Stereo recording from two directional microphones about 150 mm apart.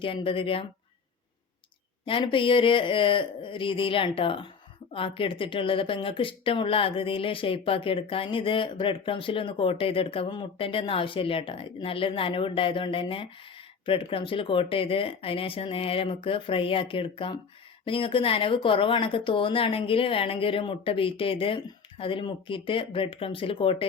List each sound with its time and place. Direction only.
0.0 s speech: 35° left (ahead or behind)
2.0 s speech: 35° left (ahead or behind)